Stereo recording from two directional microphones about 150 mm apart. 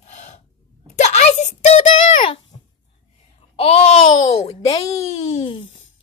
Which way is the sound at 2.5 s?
35° left (ahead or behind).